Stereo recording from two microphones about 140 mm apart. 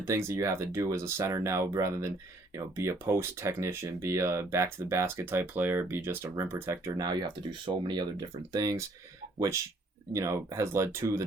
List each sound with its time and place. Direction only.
0.0 s speech: 20° right (ahead or behind)
10.1 s speech: 20° right (ahead or behind)